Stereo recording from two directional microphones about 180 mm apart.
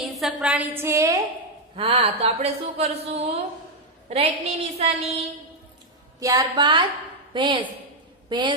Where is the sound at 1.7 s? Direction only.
30° right (ahead or behind).